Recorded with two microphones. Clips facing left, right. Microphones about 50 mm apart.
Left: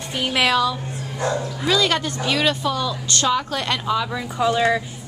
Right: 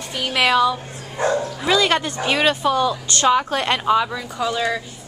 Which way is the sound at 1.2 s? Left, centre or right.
Right.